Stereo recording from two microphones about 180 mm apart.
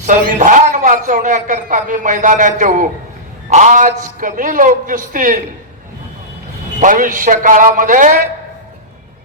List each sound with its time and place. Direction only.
0.0 s a man's voice: 45° right (ahead or behind)
6.7 s a man's voice: 45° right (ahead or behind)